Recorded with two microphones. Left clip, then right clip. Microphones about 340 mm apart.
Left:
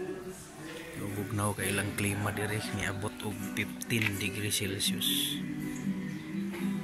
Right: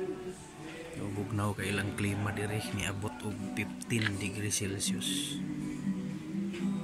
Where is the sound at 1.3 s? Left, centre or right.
Centre.